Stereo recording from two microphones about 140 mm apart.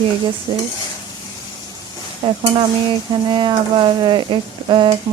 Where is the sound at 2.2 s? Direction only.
35° right (ahead or behind).